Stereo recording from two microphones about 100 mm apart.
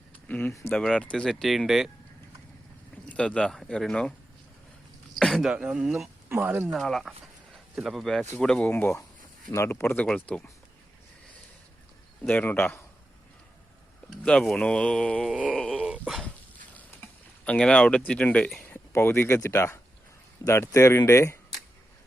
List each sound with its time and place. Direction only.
0.3 s speech: 15° left (ahead or behind); by 1.9 s 5° right (ahead or behind)
2.9 s speech: 15° left (ahead or behind)
5.2 s speech: centre (ahead or behind); by 6.6 s 15° right (ahead or behind)
6.7 s speech: centre (ahead or behind)
8.7 s speech: 25° left (ahead or behind)
12.3 s speech: 20° left (ahead or behind)
14.1 s speech: 5° left (ahead or behind)
15.3 s speech: 10° right (ahead or behind)
15.5 s a sound: 5° left (ahead or behind)
15.8 s dog: 5° right (ahead or behind)
16.7 s typing: 15° left (ahead or behind)
18.6 s speech: 25° left (ahead or behind)